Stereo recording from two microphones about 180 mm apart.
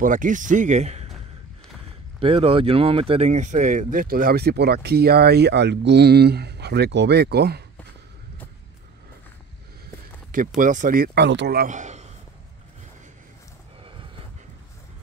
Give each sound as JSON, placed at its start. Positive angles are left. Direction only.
{"t": 0.0, "sound": "speech", "side_deg": -45}
{"t": 2.1, "sound": "speech", "side_deg": -30}
{"t": 10.3, "sound": "speech", "side_deg": -50}
{"t": 11.7, "sound": "a man's voice", "side_deg": -40}